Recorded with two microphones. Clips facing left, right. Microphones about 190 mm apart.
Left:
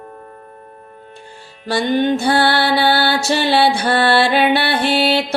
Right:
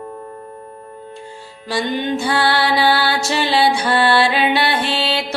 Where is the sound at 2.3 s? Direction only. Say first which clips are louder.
Left 2 dB; 60° left (ahead or behind).